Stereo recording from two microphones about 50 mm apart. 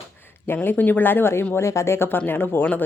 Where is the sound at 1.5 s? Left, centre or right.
Left.